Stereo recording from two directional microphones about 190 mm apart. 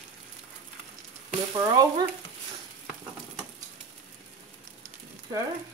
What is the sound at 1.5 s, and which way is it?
Speech, 15° right (ahead or behind).